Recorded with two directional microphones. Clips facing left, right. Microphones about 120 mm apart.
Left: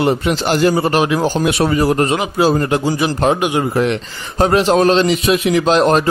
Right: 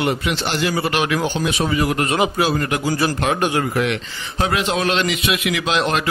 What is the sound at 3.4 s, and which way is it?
Speech, 15° left (ahead or behind).